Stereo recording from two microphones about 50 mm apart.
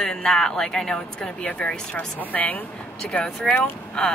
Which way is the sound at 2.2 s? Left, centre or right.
Left.